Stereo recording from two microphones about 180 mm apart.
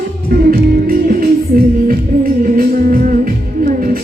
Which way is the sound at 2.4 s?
50° right (ahead or behind).